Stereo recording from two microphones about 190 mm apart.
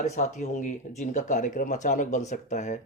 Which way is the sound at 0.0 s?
40° left (ahead or behind).